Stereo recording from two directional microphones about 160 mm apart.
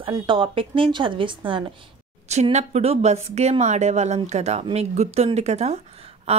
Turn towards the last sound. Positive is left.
turn(degrees=-40)  # may be behind; listen again after turning